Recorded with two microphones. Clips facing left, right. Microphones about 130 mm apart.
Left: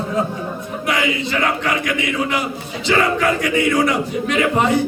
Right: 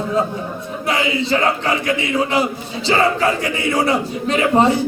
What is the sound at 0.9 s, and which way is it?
A man's voice, 30° right (ahead or behind).